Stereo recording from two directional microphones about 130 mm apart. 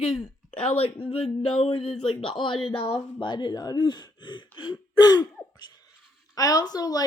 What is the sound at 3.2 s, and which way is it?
Speech, 35° left (ahead or behind).